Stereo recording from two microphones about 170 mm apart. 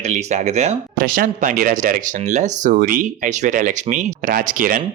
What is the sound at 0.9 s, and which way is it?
Speech, 55° right (ahead or behind).